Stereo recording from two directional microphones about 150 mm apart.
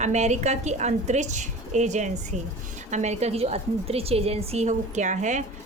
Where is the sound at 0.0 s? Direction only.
50° right (ahead or behind).